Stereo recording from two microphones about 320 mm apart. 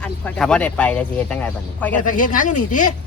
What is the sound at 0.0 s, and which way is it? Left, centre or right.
Speech, centre.